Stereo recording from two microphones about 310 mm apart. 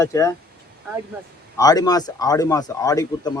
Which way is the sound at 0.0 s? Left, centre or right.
Centre.